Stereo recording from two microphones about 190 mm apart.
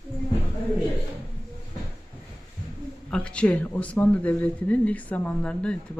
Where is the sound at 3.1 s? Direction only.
5° left (ahead or behind).